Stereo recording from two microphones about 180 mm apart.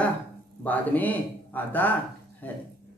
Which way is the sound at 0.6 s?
10° left (ahead or behind).